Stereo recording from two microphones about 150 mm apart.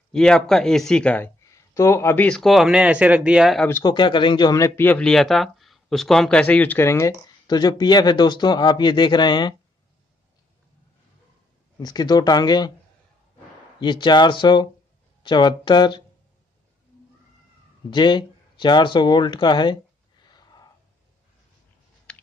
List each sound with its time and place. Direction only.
0.1 s speech: 5° left (ahead or behind)
1.4 s speech: 20° left (ahead or behind); by 3.6 s 5° right (ahead or behind)
3.6 s speech: 20° left (ahead or behind)
3.9 s speech: 30° left (ahead or behind)
11.8 s speech: 25° left (ahead or behind)
13.7 s speech: 30° left (ahead or behind)
17.8 s speech: 30° left (ahead or behind)
20.2 s wheeze: 25° left (ahead or behind)